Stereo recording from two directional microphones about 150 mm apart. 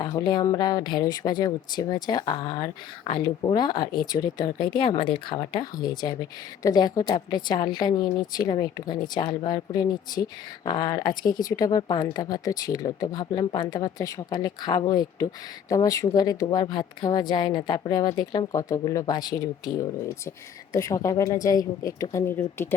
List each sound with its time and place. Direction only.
0.0 s a woman's voice: 25° left (ahead or behind)